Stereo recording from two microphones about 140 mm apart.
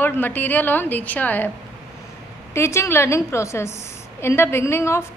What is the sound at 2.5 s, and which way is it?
A woman's voice, 20° left (ahead or behind).